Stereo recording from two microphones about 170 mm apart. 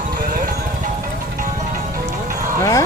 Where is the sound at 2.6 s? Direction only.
20° left (ahead or behind).